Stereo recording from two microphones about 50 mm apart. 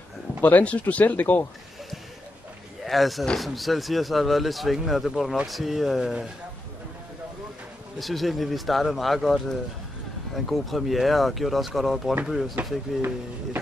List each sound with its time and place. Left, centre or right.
0.4 s speech: left
2.8 s speech: centre
8.0 s speech: centre